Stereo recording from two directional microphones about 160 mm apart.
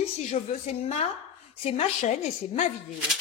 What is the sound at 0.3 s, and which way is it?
Speech, 50° left (ahead or behind).